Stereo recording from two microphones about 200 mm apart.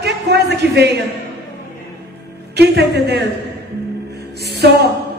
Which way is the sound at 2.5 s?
55° right (ahead or behind).